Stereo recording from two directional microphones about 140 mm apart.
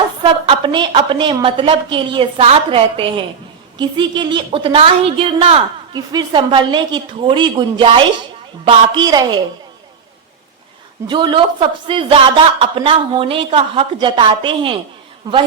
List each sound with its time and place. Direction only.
0.2 s a man's voice: 35° right (ahead or behind)
5.9 s a man's voice: 30° right (ahead or behind)
11.0 s a man's voice: 35° right (ahead or behind)